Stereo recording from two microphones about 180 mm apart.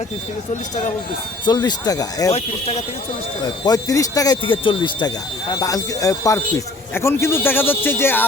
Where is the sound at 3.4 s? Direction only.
20° left (ahead or behind).